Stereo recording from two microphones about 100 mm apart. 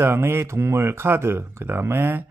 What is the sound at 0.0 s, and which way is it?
Speech, 25° right (ahead or behind).